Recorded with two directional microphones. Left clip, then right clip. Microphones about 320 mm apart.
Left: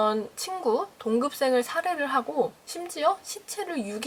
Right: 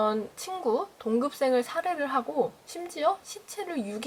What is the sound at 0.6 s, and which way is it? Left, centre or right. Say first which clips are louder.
Speech: left 2 dB; centre.